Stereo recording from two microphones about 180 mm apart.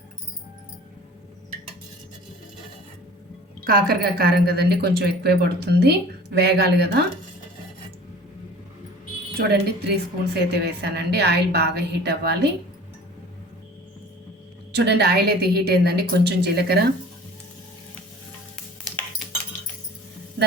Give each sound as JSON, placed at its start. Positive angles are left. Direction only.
{"t": 3.6, "sound": "a woman's voice", "side_deg": -55}
{"t": 9.4, "sound": "a woman's voice", "side_deg": -65}
{"t": 14.8, "sound": "a woman's voice", "side_deg": -65}